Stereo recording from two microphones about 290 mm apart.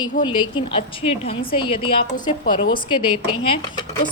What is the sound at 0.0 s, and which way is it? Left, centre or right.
A woman's voice, centre.